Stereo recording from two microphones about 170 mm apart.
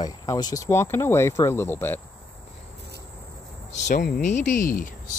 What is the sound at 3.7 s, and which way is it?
Cricket, 45° left (ahead or behind).